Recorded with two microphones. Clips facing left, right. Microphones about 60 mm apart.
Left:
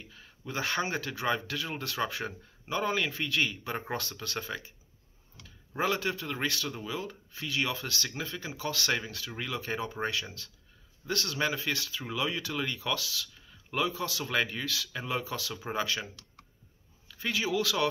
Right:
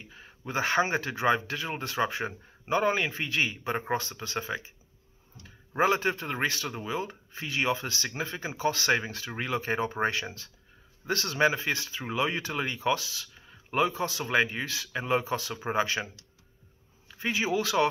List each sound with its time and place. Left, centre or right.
0.0 s speech: right
17.1 s speech: right